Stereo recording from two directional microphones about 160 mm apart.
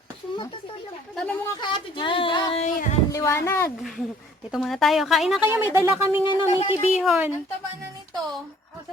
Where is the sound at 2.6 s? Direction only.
50° left (ahead or behind).